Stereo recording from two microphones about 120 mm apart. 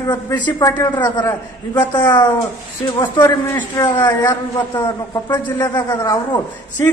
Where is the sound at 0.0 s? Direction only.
40° left (ahead or behind).